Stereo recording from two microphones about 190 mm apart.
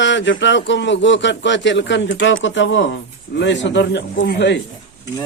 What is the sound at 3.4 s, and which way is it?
A man's voice, 70° left (ahead or behind).